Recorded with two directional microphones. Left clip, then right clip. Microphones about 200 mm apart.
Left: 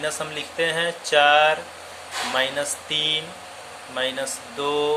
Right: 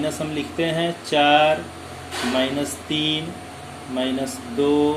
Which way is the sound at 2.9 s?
25° left (ahead or behind).